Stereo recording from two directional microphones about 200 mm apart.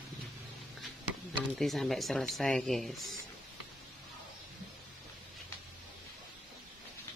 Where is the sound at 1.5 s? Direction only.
Centre (ahead or behind).